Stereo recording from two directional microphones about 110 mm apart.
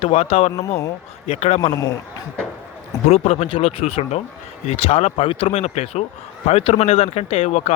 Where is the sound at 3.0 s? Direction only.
70° left (ahead or behind).